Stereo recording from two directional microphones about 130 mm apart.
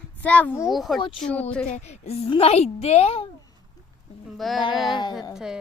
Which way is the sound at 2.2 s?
45° left (ahead or behind).